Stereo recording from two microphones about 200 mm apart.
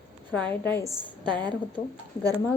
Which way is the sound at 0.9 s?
25° right (ahead or behind).